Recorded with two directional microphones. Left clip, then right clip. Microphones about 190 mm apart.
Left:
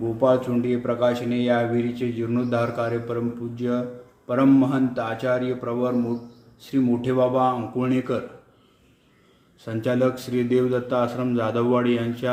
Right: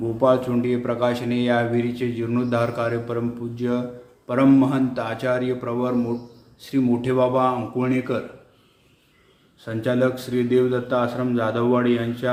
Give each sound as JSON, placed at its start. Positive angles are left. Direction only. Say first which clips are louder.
{"t": 0.2, "sound": "speech", "louder": "right 1 dB", "side_deg": 15}
{"t": 9.6, "sound": "speech", "louder": "right 1 dB", "side_deg": 20}